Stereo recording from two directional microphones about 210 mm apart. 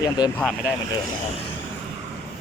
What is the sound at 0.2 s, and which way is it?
Speech, 20° left (ahead or behind).